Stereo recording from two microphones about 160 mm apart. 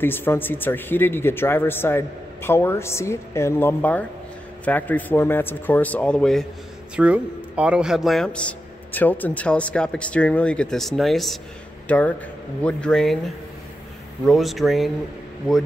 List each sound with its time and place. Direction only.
0.0 s speech: 15° left (ahead or behind)
7.0 s a man's voice: 5° right (ahead or behind)
14.2 s a man's voice: centre (ahead or behind)